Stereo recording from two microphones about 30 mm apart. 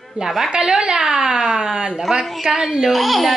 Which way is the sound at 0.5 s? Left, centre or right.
Right.